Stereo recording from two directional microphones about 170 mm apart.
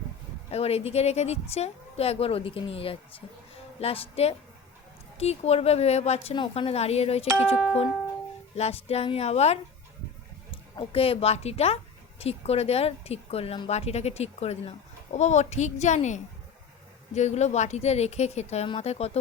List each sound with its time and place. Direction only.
0.5 s a woman's voice: 35° left (ahead or behind)
7.3 s speech: 10° right (ahead or behind)
7.5 s speech: 10° left (ahead or behind)
8.5 s a woman's voice: 40° left (ahead or behind)